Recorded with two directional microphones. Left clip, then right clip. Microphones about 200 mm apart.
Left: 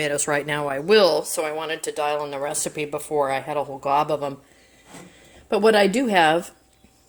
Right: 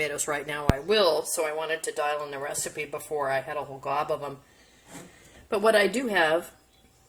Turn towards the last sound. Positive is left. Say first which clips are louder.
# left 6 dB
turn(degrees=50)  # may be behind; listen again after turning